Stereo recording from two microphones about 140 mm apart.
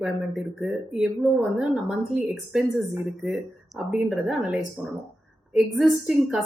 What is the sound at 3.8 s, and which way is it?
A woman's voice, 5° right (ahead or behind).